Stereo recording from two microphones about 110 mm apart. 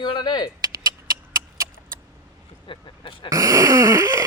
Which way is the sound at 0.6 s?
40° right (ahead or behind).